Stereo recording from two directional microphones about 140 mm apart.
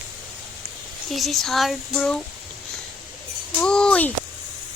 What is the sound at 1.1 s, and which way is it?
Speech, centre (ahead or behind).